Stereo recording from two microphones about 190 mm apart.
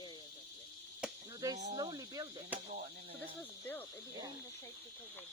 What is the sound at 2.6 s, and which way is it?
Cricket, 50° right (ahead or behind).